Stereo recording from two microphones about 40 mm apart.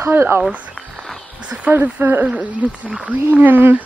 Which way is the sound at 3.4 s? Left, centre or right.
Right.